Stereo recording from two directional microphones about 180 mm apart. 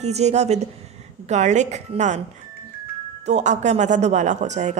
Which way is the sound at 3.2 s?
40° right (ahead or behind).